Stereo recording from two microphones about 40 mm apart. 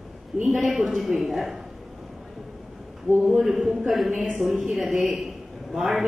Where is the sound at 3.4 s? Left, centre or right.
Centre.